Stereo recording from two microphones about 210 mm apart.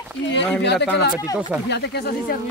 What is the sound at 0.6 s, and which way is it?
Speech, 55° left (ahead or behind).